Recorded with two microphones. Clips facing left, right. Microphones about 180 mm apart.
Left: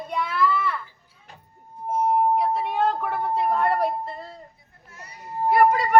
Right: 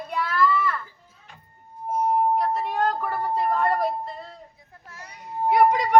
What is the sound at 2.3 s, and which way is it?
A woman's voice, centre (ahead or behind).